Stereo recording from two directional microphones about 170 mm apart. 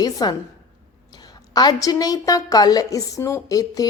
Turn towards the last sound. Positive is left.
turn(degrees=20)  # may be behind; listen again after turning